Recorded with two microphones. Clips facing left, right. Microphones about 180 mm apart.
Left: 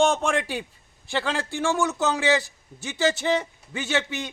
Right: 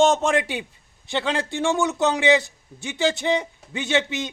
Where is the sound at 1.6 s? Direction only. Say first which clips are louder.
Right 2 dB; 20° right (ahead or behind).